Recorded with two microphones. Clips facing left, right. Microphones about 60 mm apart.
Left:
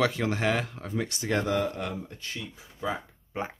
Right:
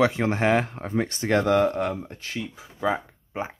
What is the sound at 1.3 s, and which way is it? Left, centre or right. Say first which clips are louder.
Speech: right 7 dB; right.